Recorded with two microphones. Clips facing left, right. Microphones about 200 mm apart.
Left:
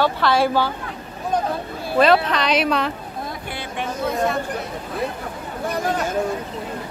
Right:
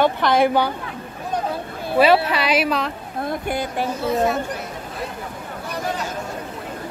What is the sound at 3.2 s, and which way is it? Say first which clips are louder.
Speech: right 9 dB; 45° right (ahead or behind).